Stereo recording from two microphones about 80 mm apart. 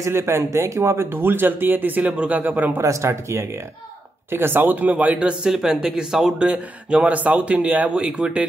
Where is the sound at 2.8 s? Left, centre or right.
Right.